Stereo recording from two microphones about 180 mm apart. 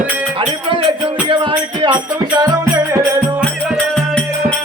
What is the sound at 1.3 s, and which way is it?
Music, 25° right (ahead or behind).